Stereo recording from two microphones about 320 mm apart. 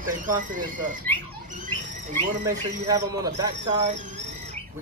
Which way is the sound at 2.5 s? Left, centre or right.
Centre.